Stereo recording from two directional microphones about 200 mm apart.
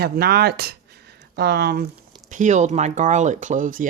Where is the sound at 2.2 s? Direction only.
40° right (ahead or behind).